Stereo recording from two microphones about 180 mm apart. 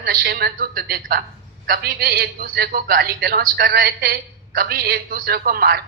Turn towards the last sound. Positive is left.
turn(degrees=-60)  # may be behind; listen again after turning